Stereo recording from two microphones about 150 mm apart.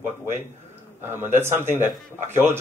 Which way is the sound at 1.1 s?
15° right (ahead or behind).